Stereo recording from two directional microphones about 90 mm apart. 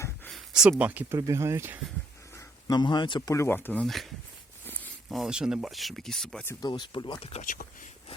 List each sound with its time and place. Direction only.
0.3 s a sound: 5° right (ahead or behind)
0.8 s speech: 15° right (ahead or behind)
1.1 s speech: 30° right (ahead or behind)
2.6 s speech: 55° left (ahead or behind)
3.4 s speech: 20° left (ahead or behind)
3.8 s speech: centre (ahead or behind)
4.6 s a sound: 20° left (ahead or behind)
5.0 s speech: 5° right (ahead or behind)
6.6 s speech: 55° left (ahead or behind)